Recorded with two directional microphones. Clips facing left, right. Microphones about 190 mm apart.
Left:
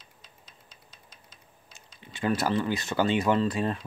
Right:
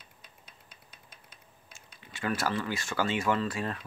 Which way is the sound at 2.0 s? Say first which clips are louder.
Left 4 dB; 20° left (ahead or behind).